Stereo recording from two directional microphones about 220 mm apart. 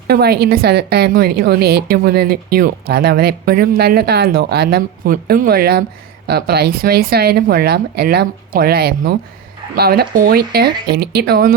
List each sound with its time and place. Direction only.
0.1 s a woman's voice: 45° right (ahead or behind)